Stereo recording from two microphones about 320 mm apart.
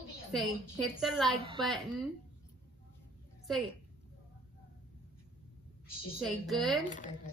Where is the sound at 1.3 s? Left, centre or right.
Centre.